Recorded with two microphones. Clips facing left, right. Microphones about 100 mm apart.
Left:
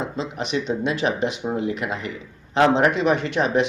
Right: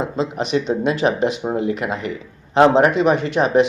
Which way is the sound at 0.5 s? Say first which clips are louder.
Right 4 dB; 40° right (ahead or behind).